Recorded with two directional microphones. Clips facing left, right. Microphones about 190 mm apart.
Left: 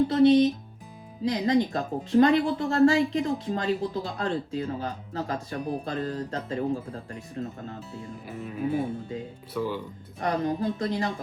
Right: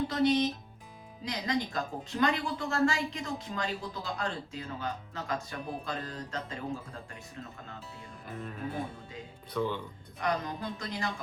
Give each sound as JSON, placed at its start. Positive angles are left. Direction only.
{"t": 0.1, "sound": "speech", "side_deg": 30}
{"t": 8.3, "sound": "speech", "side_deg": 5}
{"t": 10.2, "sound": "speech", "side_deg": 30}